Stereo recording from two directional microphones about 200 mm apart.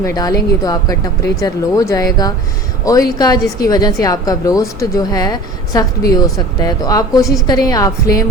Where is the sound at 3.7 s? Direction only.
20° left (ahead or behind).